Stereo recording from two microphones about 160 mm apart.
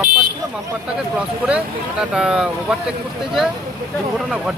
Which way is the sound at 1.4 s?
5° right (ahead or behind).